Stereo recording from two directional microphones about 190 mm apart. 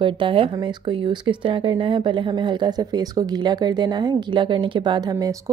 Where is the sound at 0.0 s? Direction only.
25° right (ahead or behind).